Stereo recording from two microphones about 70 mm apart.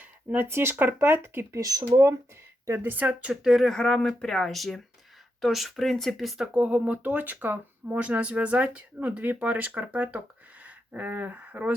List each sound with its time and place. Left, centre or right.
0.0 s a sound: right
0.4 s speech: right
1.6 s speech: right
2.8 s speech: right
3.4 s speech: centre
6.4 s speech: centre